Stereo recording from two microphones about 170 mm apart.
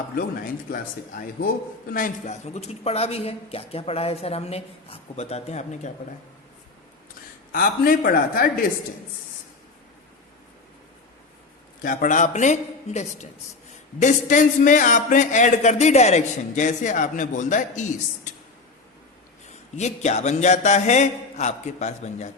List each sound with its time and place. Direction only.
0.2 s speech: 60° left (ahead or behind)
1.9 s a man's voice: 55° left (ahead or behind)
7.5 s speech: 55° left (ahead or behind)
11.8 s a man's voice: 55° left (ahead or behind)
19.7 s a man's voice: 40° left (ahead or behind)